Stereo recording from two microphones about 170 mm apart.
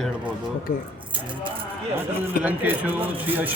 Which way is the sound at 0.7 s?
50° left (ahead or behind).